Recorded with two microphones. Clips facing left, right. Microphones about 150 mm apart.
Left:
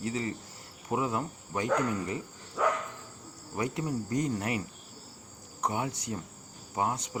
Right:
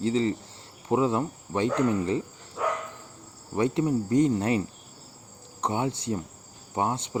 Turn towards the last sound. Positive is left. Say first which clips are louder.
# right 3 dB
turn(degrees=-25)  # may be behind; listen again after turning